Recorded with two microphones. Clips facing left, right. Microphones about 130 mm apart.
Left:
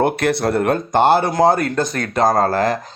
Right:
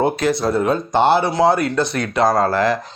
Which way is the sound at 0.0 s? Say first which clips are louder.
Even; 60° left (ahead or behind).